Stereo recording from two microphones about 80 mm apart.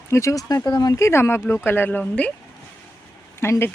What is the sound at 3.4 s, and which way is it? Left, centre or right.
Speech, left.